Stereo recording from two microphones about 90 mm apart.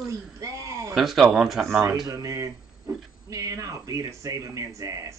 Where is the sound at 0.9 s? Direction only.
Centre (ahead or behind).